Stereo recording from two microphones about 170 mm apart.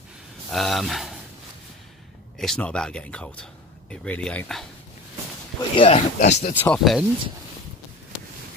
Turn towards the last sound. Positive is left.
turn(degrees=0)  # may be behind; listen again after turning